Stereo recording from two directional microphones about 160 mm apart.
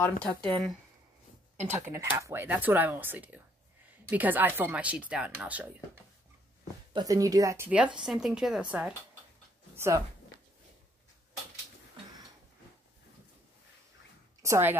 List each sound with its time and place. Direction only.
0.0 s speech: 10° left (ahead or behind)
1.6 s speech: 15° right (ahead or behind)
6.9 s speech: 25° right (ahead or behind); by 8.6 s 5° right (ahead or behind)
9.8 s speech: 20° right (ahead or behind)
14.4 s a woman's voice: 15° right (ahead or behind)